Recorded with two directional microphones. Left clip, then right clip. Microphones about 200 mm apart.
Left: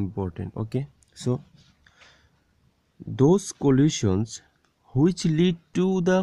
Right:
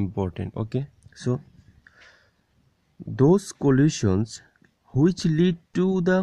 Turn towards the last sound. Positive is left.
turn(degrees=0)  # may be behind; listen again after turning